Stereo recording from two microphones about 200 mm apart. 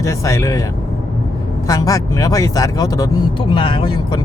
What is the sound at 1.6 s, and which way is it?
Speech, 15° left (ahead or behind).